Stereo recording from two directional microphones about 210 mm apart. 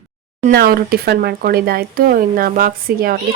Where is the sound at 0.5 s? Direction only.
45° right (ahead or behind).